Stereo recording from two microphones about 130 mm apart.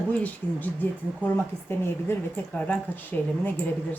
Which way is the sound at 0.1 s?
10° left (ahead or behind).